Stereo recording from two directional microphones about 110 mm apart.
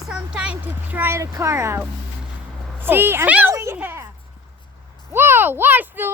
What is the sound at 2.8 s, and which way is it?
Speech, 20° right (ahead or behind).